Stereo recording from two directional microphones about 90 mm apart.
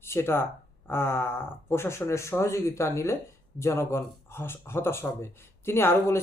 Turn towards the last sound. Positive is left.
turn(degrees=30)  # may be behind; listen again after turning